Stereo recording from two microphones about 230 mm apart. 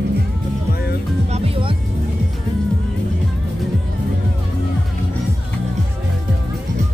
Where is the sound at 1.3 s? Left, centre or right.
Right.